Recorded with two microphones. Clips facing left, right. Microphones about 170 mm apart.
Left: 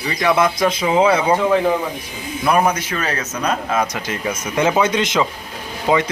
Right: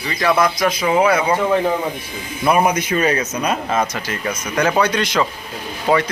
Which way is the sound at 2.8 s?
15° right (ahead or behind).